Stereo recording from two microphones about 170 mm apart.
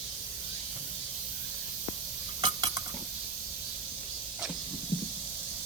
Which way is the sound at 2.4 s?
25° right (ahead or behind).